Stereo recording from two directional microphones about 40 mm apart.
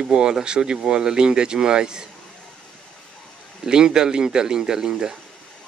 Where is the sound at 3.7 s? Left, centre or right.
Centre.